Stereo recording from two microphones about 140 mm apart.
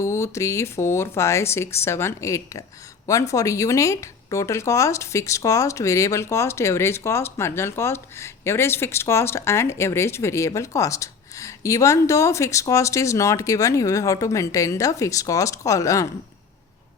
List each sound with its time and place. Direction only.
0.0 s speech: 20° left (ahead or behind)